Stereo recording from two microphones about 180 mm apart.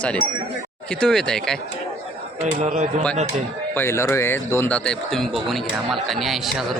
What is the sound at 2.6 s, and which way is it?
Speech, 40° right (ahead or behind).